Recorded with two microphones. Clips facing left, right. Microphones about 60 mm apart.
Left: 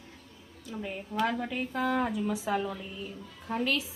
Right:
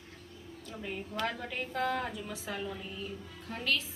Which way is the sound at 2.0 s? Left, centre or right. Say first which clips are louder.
Left 8 dB; centre.